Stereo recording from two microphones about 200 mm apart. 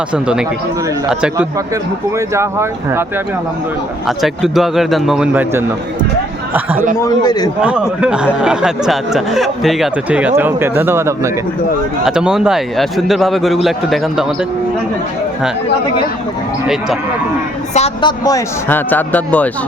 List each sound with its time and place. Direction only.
0.1 s speech: 5° right (ahead or behind)
2.1 s speech: 15° right (ahead or behind)
4.0 s speech: centre (ahead or behind)
7.0 s a man's voice: 20° left (ahead or behind)
7.6 s speech: 5° right (ahead or behind)
17.7 s a woman's voice: 30° left (ahead or behind)
18.3 s a man's voice: 15° left (ahead or behind)